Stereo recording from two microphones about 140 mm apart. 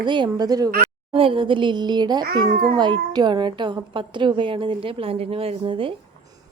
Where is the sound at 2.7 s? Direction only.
30° right (ahead or behind).